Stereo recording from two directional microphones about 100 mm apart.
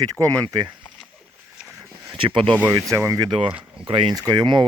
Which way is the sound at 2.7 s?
30° right (ahead or behind).